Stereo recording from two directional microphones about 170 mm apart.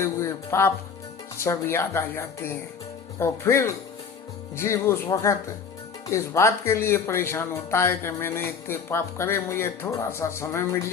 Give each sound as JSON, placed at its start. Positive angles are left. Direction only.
{"t": 0.0, "sound": "music", "side_deg": 15}
{"t": 1.4, "sound": "speech", "side_deg": 15}